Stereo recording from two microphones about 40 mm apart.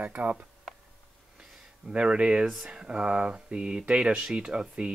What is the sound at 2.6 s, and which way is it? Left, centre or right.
Speech, right.